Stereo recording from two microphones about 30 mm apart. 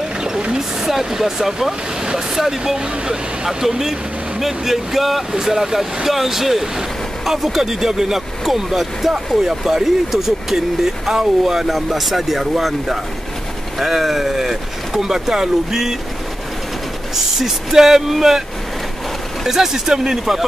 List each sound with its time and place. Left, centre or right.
0.6 s speech: centre
17.1 s speech: centre
19.4 s speech: centre